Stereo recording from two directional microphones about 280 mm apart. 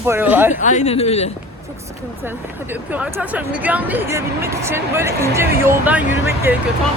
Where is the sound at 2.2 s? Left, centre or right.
Centre.